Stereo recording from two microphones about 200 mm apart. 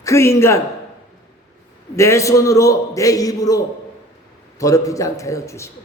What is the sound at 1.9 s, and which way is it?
A man's voice, 15° left (ahead or behind).